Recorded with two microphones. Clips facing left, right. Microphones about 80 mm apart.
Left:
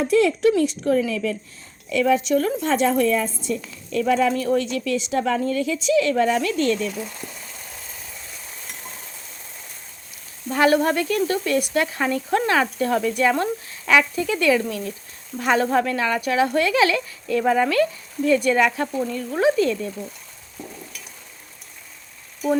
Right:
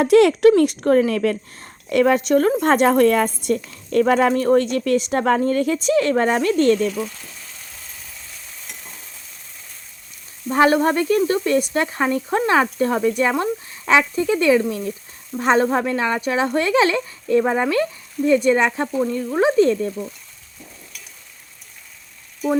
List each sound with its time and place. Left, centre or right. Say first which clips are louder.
0.0 s speech: right 5 dB; right
3.8 s speech: right 4 dB; right
10.5 s speech: right 2 dB; right